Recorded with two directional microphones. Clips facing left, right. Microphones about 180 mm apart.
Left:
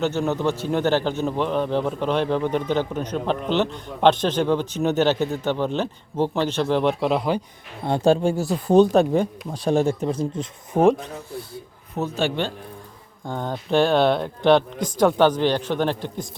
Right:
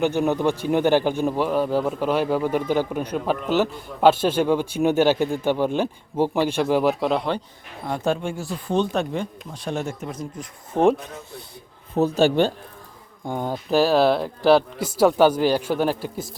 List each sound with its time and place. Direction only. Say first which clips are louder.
0.0 s a man's voice: right 2 dB; 15° right (ahead or behind)
7.9 s speech: left 6 dB; 30° left (ahead or behind)
10.7 s speech: left 1 dB; 10° left (ahead or behind)
11.9 s a man's voice: right 6 dB; 35° right (ahead or behind)
13.2 s a man's voice: right 1 dB; 10° right (ahead or behind)